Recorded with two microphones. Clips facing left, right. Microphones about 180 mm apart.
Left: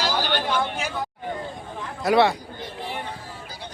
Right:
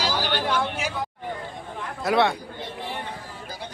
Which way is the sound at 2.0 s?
Centre (ahead or behind).